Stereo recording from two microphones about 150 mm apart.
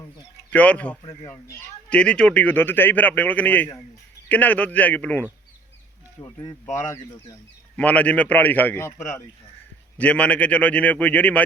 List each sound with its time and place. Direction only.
0.5 s speech: 10° left (ahead or behind)
1.0 s speech: 20° left (ahead or behind)
1.9 s speech: 5° left (ahead or behind)
7.8 s speech: 10° left (ahead or behind)